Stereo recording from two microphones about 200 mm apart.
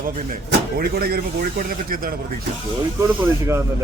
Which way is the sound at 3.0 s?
15° right (ahead or behind).